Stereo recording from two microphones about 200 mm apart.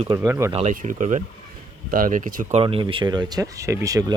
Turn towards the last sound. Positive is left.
turn(degrees=-15)  # may be behind; listen again after turning